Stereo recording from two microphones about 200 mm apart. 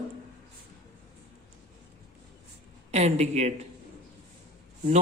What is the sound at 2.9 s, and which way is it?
Speech, 35° right (ahead or behind).